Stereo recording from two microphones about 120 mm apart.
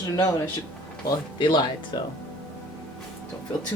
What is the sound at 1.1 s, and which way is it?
Speech, 35° left (ahead or behind).